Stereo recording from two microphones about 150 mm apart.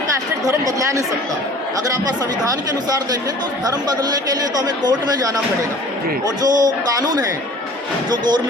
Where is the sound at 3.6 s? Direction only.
25° right (ahead or behind).